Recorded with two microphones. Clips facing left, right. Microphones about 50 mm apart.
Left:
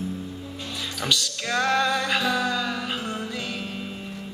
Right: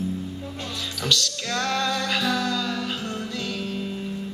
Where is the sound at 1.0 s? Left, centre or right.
Centre.